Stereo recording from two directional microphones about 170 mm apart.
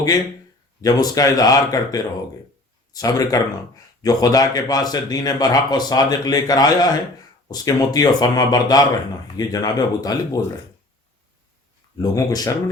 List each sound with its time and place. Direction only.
0.8 s speech: 20° left (ahead or behind)
11.9 s speech: 20° left (ahead or behind)